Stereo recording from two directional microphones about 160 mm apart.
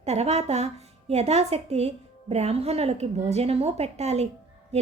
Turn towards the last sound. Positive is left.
turn(degrees=-40)  # may be behind; listen again after turning